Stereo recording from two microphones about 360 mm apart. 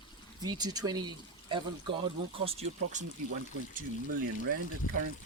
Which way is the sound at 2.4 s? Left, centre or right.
Centre.